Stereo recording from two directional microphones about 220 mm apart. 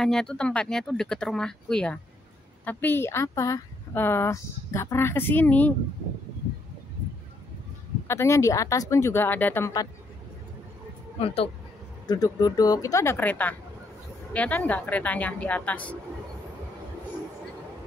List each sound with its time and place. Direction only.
0.0 s a woman's voice: 5° left (ahead or behind)
8.1 s a woman's voice: 10° left (ahead or behind)
11.1 s a woman's voice: 25° left (ahead or behind); by 16.0 s 5° left (ahead or behind)